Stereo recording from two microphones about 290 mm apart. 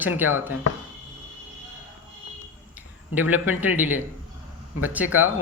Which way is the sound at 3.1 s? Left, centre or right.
Centre.